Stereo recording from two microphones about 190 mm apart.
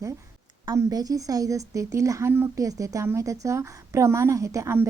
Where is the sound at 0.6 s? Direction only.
20° right (ahead or behind).